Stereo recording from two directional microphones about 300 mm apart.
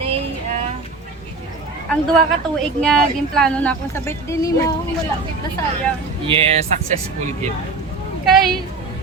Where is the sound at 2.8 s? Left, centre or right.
Centre.